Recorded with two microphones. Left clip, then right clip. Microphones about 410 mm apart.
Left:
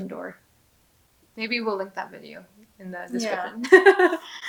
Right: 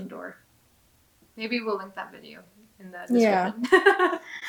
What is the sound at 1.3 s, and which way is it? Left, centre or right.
A woman's voice, left.